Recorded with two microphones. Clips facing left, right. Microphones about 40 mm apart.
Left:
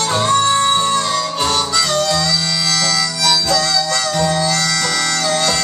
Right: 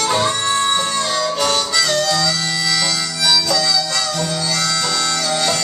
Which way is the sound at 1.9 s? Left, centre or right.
Centre.